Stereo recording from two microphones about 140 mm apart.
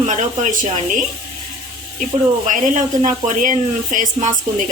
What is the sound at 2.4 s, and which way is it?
A woman's voice, 65° right (ahead or behind).